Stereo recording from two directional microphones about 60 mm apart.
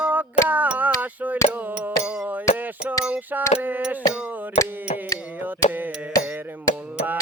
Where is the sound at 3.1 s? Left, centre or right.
Right.